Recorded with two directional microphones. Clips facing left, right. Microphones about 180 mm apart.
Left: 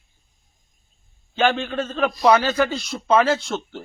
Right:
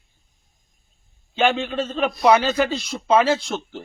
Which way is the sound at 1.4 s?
5° right (ahead or behind).